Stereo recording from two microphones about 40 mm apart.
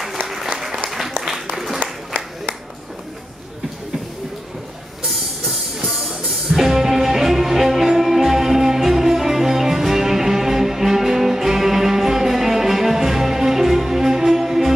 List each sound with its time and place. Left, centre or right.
0.3 s applause: centre
1.8 s a sound: right
5.9 s music: centre